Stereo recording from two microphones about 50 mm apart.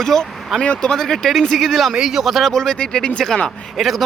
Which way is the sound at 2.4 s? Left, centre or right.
Centre.